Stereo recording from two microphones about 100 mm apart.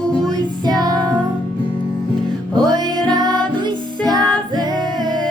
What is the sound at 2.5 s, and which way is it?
Music, 45° right (ahead or behind).